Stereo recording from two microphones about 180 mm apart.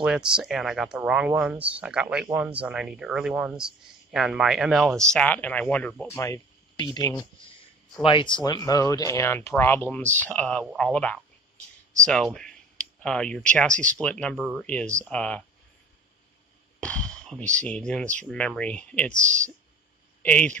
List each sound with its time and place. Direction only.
0.0 s speech: 5° right (ahead or behind)
16.8 s a sound: 5° left (ahead or behind)
17.6 s speech: 5° left (ahead or behind)
19.1 s speech: 40° right (ahead or behind)
20.2 s speech: 10° left (ahead or behind)